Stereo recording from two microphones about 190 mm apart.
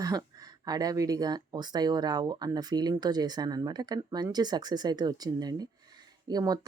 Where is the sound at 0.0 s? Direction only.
20° right (ahead or behind).